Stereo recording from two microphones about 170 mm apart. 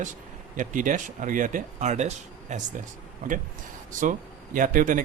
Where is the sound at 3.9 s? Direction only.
50° right (ahead or behind).